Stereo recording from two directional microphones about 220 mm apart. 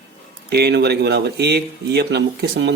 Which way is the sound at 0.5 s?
50° right (ahead or behind).